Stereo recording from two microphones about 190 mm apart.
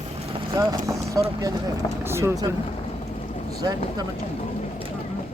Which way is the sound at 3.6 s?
20° right (ahead or behind).